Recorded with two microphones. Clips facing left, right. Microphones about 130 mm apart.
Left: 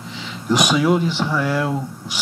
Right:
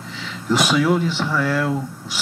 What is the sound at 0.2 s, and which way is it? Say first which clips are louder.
Speech: left 1 dB; 15° left (ahead or behind).